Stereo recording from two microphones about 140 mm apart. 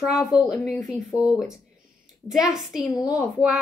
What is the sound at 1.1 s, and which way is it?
Speech, 25° left (ahead or behind).